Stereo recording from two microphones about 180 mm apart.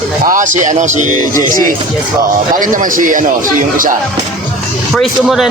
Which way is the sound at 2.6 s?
50° right (ahead or behind).